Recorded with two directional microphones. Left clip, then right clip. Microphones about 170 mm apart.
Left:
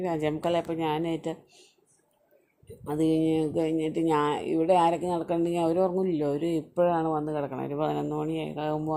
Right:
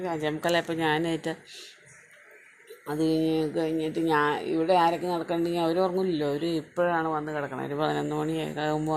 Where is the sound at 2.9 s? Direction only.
10° left (ahead or behind).